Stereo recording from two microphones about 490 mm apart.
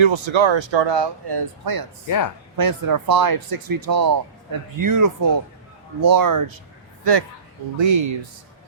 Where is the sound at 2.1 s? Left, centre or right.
Left.